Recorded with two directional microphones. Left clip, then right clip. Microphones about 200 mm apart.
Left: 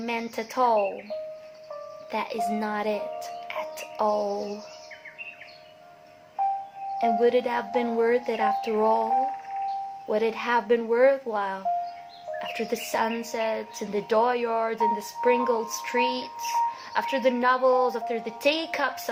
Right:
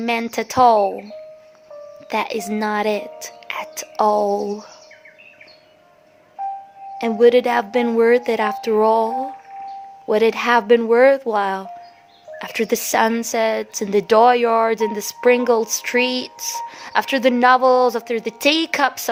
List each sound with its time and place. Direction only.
0.0 s speech: 55° right (ahead or behind)
2.0 s speech: 55° right (ahead or behind)
7.0 s a woman's voice: 55° right (ahead or behind)
10.1 s a woman's voice: 55° right (ahead or behind)